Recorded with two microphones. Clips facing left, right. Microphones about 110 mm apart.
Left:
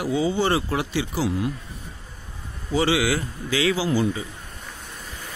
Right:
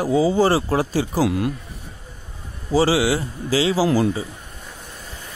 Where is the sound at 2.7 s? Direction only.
35° right (ahead or behind).